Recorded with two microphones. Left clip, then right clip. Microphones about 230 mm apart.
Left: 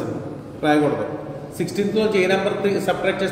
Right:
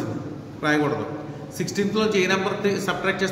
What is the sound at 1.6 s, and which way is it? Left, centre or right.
A man's voice, right.